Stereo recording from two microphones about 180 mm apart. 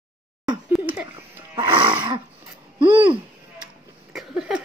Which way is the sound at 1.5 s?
30° right (ahead or behind).